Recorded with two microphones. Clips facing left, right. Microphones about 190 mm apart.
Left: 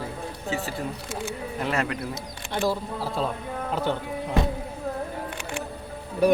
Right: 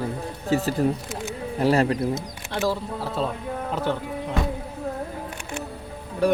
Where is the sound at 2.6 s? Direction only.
Centre (ahead or behind).